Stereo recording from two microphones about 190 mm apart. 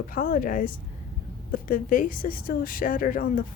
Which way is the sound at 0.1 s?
50° left (ahead or behind).